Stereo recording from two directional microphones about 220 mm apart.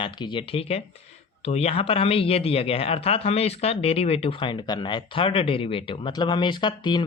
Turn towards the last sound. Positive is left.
turn(degrees=20)  # may be behind; listen again after turning